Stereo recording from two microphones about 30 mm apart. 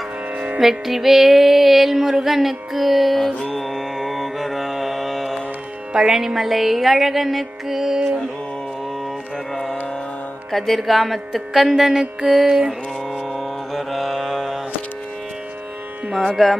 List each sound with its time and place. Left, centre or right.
0.6 s music: centre
9.5 s music: centre
11.9 s music: right
12.3 s music: centre
13.7 s mantra: centre
16.4 s music: centre